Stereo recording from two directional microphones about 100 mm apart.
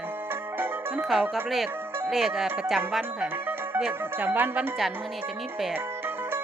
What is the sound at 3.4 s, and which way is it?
Speech, 20° right (ahead or behind).